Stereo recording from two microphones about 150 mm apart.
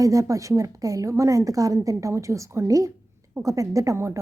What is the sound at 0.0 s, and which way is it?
A woman's voice, 20° right (ahead or behind).